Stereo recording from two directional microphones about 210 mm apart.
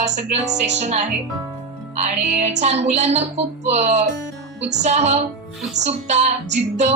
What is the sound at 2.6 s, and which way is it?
Music, 30° right (ahead or behind).